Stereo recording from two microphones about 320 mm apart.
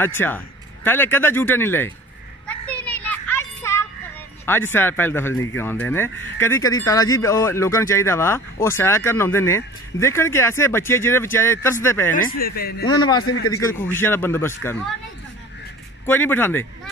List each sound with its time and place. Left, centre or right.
0.0 s speech: centre
2.4 s children playing: centre
4.5 s speech: centre
12.1 s speech: left
13.2 s a man's voice: left
13.6 s speech: centre
16.1 s speech: centre